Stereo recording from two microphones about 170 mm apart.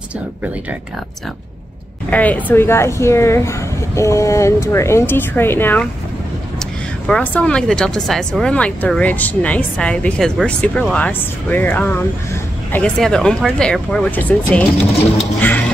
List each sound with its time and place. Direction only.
2.0 s speech: 10° left (ahead or behind)